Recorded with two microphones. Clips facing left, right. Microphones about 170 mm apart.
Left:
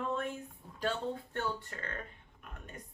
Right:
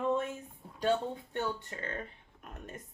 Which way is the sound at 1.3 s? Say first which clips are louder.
Right 2 dB; 20° right (ahead or behind).